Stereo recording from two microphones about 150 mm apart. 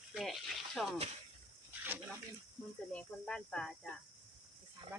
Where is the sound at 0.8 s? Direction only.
Centre (ahead or behind).